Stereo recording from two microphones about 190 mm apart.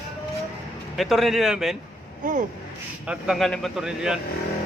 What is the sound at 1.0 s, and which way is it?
Speech, centre (ahead or behind).